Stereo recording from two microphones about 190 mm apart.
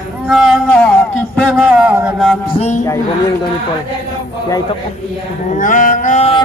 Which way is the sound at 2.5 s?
40° left (ahead or behind).